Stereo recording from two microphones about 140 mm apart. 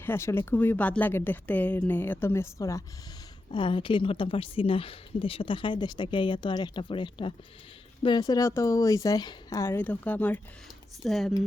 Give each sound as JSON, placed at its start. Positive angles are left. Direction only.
{"t": 0.0, "sound": "speech", "side_deg": 15}
{"t": 3.5, "sound": "a woman's voice", "side_deg": 35}
{"t": 11.0, "sound": "speech", "side_deg": 0}